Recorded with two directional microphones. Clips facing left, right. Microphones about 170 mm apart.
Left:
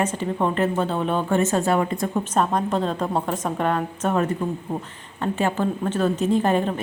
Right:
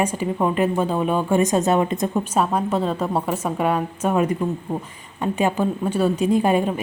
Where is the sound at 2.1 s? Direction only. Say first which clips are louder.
Left 1 dB; 5° right (ahead or behind).